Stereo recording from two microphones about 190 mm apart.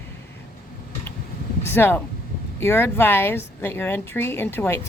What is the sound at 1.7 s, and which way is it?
Speech, 10° left (ahead or behind).